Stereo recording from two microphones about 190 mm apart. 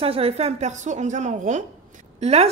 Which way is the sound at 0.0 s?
30° right (ahead or behind).